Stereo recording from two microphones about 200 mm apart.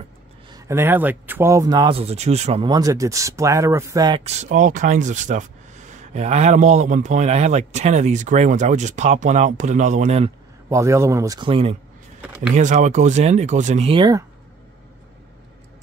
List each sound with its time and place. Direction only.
0.5 s speech: 15° right (ahead or behind)
4.2 s speech: 35° right (ahead or behind)
10.7 s speech: 15° right (ahead or behind)
12.5 s speech: 35° right (ahead or behind)